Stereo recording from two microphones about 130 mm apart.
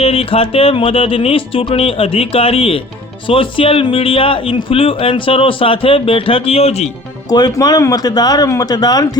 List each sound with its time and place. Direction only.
0.0 s a man's voice: 50° left (ahead or behind)
7.3 s speech: 30° left (ahead or behind)